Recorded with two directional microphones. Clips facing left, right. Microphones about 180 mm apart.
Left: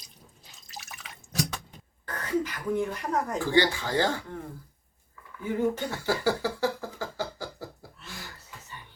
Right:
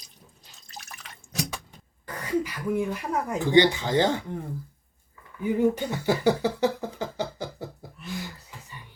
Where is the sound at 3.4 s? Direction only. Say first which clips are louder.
Right 6 dB; 20° right (ahead or behind).